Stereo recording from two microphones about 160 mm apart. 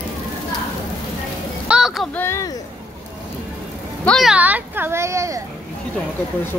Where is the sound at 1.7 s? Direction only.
5° right (ahead or behind).